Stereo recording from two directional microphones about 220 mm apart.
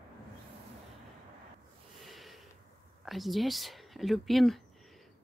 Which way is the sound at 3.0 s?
Centre (ahead or behind).